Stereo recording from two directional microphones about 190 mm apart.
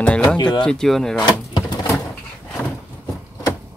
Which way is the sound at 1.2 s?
20° left (ahead or behind).